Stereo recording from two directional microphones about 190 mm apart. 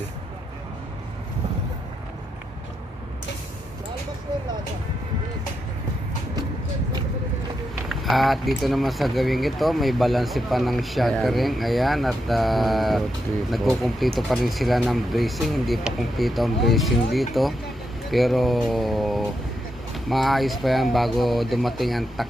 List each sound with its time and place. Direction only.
7.9 s speech: centre (ahead or behind)